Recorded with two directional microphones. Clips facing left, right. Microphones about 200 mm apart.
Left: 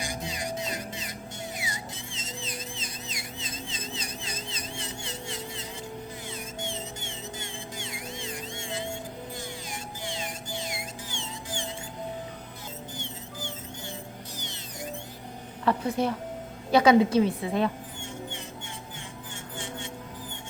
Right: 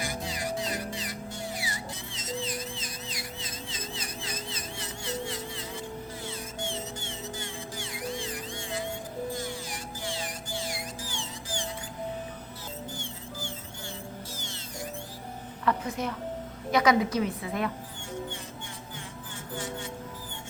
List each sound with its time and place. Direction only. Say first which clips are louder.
0.0 s music: right 1 dB; 20° left (ahead or behind)
14.3 s music: even; 20° left (ahead or behind)
15.6 s a woman's voice: left 4 dB; 30° left (ahead or behind)
19.5 s music: right 3 dB; 25° left (ahead or behind)